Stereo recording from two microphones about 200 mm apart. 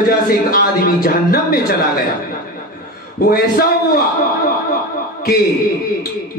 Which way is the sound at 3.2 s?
50° left (ahead or behind).